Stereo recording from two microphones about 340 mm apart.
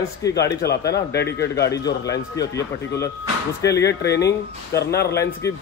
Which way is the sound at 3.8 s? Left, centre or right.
Left.